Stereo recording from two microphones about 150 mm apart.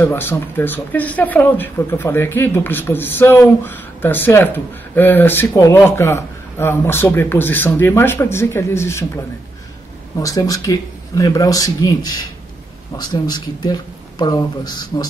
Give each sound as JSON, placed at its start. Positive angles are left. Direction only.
{"t": 0.0, "sound": "speech", "side_deg": 15}